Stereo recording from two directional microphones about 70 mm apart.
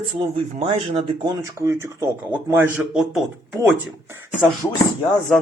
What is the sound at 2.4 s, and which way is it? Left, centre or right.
Speech, right.